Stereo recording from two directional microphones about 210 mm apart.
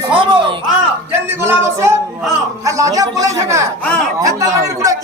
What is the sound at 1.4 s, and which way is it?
Speech, 10° right (ahead or behind).